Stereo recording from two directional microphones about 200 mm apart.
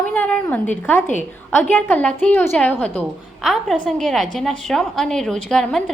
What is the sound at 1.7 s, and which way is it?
A woman's voice, 10° left (ahead or behind).